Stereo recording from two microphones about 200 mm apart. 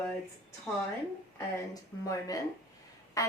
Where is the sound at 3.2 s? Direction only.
15° left (ahead or behind).